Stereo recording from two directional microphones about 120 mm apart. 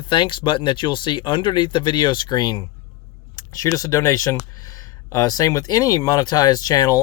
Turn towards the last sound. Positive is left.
turn(degrees=35)  # may be behind; listen again after turning